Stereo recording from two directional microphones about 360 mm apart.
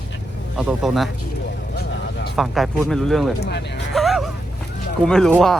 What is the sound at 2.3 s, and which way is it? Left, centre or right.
Speech, centre.